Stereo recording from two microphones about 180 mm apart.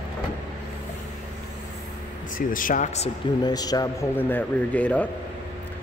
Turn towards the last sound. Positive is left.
turn(degrees=10)  # may be behind; listen again after turning